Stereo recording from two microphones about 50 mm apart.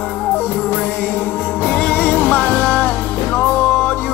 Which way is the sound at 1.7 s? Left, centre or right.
Left.